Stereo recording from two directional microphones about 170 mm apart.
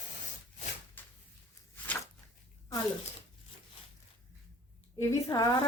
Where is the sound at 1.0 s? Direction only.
10° left (ahead or behind).